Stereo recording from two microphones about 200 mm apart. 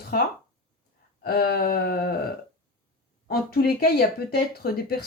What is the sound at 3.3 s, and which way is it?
Speech, 50° left (ahead or behind).